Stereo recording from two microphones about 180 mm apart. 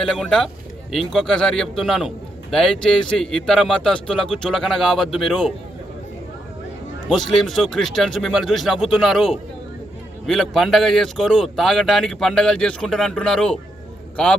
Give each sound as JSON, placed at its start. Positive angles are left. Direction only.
{"t": 0.0, "sound": "a man's voice", "side_deg": 5}
{"t": 7.1, "sound": "a man's voice", "side_deg": 0}